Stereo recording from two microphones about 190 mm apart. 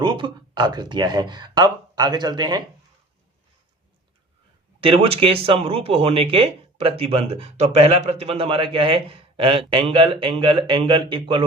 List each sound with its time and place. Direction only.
0.0 s speech: 25° right (ahead or behind)
4.8 s speech: 30° right (ahead or behind)